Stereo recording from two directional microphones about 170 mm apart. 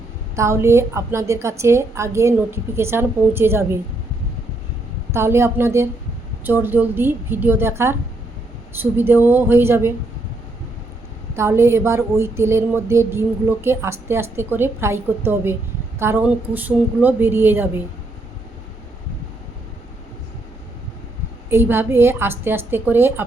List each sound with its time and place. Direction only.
0.3 s speech: 15° right (ahead or behind)
5.1 s speech: 15° right (ahead or behind)
11.3 s speech: 15° right (ahead or behind)
21.5 s speech: 15° right (ahead or behind)